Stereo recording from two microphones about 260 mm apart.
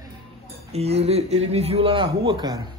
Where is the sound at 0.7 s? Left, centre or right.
Right.